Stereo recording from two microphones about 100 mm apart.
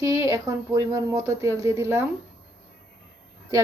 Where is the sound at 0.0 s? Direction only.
30° right (ahead or behind).